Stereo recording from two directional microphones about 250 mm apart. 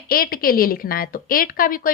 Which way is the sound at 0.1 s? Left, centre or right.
Left.